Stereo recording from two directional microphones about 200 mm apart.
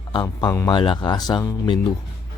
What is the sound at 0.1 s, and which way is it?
Speech, 20° left (ahead or behind).